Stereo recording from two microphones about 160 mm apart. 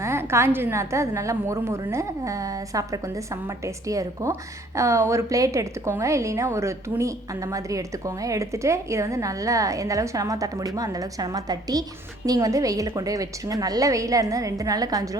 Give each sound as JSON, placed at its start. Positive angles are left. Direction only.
{"t": 0.0, "sound": "a woman's voice", "side_deg": -15}